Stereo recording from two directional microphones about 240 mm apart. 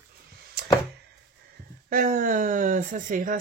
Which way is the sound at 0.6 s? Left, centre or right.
Right.